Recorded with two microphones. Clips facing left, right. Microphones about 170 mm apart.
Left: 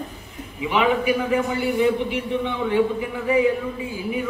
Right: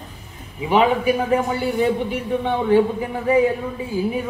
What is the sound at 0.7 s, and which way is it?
Speech, 35° right (ahead or behind).